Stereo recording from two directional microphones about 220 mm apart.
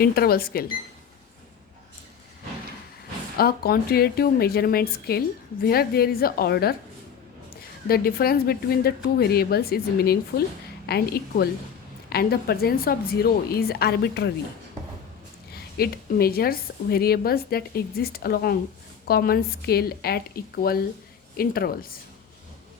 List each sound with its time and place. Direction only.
0.0 s a woman's voice: 45° left (ahead or behind)
3.3 s a woman's voice: 45° left (ahead or behind)
7.9 s a woman's voice: 45° left (ahead or behind)
15.8 s a woman's voice: 45° left (ahead or behind)